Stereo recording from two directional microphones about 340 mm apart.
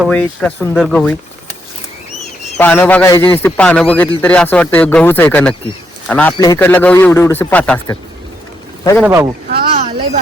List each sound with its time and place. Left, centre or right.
0.0 s a man's voice: centre
2.6 s a man's voice: centre
9.0 s a man's voice: centre
9.5 s a sound: right